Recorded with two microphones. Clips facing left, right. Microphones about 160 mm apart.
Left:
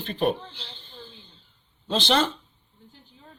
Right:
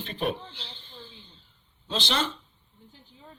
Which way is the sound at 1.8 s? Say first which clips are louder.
Left 6 dB; 50° left (ahead or behind).